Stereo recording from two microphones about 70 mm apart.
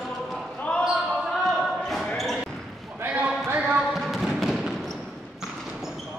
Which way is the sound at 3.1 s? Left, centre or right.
Centre.